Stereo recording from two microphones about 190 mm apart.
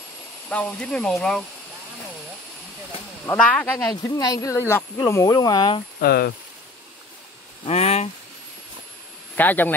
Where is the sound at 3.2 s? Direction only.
5° left (ahead or behind).